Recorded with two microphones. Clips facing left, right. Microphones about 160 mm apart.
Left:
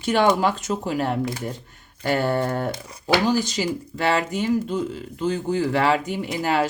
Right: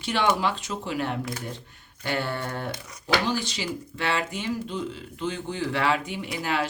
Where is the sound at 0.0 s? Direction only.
45° left (ahead or behind).